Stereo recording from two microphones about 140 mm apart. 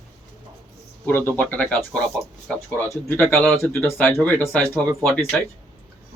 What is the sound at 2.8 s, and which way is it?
Speech, 15° left (ahead or behind).